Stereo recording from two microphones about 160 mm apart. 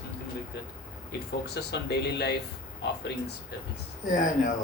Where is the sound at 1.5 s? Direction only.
90° left.